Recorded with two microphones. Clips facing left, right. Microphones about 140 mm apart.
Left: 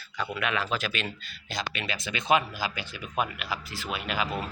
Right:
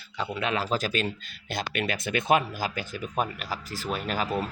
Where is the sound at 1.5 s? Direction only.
50° right (ahead or behind).